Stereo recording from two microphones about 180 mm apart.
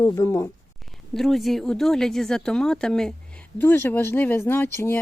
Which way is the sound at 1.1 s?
Centre (ahead or behind).